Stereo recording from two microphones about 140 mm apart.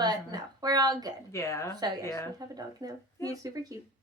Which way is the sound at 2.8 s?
25° right (ahead or behind).